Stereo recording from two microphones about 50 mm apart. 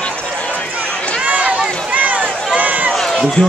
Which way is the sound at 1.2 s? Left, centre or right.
Right.